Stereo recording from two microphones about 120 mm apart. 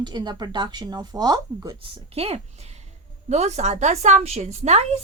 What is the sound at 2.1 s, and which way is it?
Speech, 55° right (ahead or behind).